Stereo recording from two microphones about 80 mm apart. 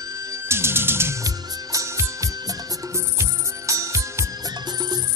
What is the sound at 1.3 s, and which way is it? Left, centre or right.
Music, right.